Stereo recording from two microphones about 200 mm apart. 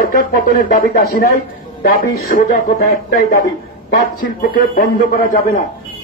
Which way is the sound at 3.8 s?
45° left (ahead or behind).